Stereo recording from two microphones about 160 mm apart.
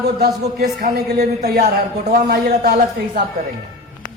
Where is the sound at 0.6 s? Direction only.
75° right (ahead or behind).